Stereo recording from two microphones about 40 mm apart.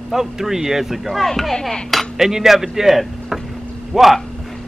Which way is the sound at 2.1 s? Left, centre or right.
Centre.